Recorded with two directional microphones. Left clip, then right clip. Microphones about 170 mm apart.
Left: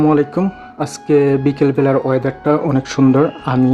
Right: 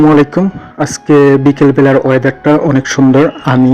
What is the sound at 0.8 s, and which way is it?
A man's voice, 20° right (ahead or behind).